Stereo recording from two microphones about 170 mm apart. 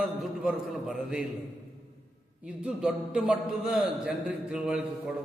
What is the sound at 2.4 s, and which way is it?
A man's voice, 5° right (ahead or behind).